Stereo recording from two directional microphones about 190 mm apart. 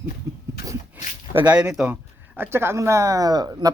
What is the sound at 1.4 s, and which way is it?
Speech, 5° right (ahead or behind).